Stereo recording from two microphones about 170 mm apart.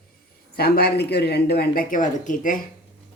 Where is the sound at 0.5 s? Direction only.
65° left (ahead or behind); by 2.6 s 50° left (ahead or behind).